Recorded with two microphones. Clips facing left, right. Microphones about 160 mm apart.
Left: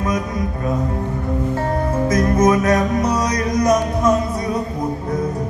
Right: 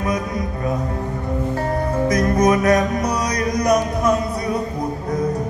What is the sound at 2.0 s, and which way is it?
Music, 25° left (ahead or behind).